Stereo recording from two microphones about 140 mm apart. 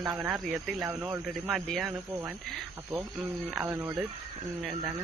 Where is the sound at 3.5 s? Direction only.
15° right (ahead or behind).